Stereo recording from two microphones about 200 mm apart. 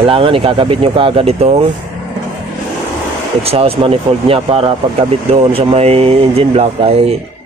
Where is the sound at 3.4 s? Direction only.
30° right (ahead or behind).